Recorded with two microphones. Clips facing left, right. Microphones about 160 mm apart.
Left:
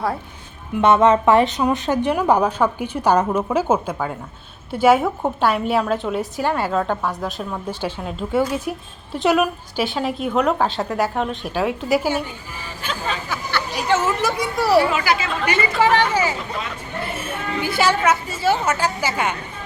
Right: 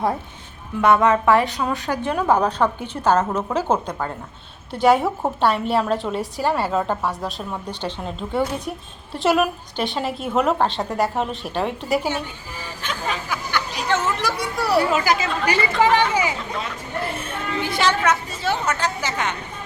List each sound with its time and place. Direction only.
0.8 s a woman's voice: 20° left (ahead or behind); by 12.2 s 5° left (ahead or behind)
12.9 s speech: 15° right (ahead or behind)
13.9 s speech: 5° left (ahead or behind)
14.9 s speech: 45° right (ahead or behind)
15.8 s speech: 15° right (ahead or behind)
17.2 s a sound: 5° left (ahead or behind)
17.7 s a woman's voice: 5° left (ahead or behind)